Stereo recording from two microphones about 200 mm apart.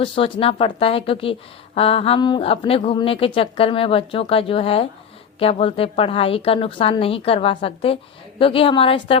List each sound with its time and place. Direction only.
0.0 s speech: 25° left (ahead or behind)